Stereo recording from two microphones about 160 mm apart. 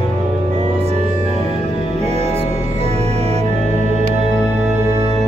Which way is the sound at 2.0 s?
40° right (ahead or behind).